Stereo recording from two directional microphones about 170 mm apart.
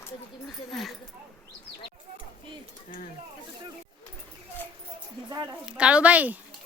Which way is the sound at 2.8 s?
50° left (ahead or behind).